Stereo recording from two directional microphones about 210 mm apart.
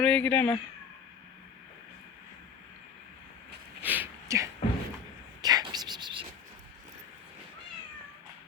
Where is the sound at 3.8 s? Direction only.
10° right (ahead or behind).